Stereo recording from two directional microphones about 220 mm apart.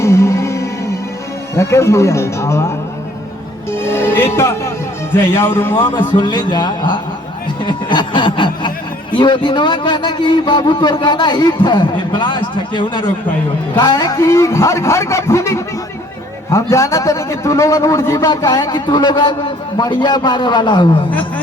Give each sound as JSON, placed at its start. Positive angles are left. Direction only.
{"t": 0.0, "sound": "music", "side_deg": 15}
{"t": 1.5, "sound": "a man's voice", "side_deg": 10}